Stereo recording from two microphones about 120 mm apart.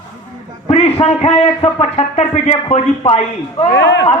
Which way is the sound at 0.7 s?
60° left (ahead or behind).